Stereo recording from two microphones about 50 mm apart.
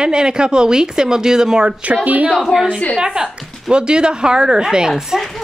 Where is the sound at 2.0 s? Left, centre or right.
Right.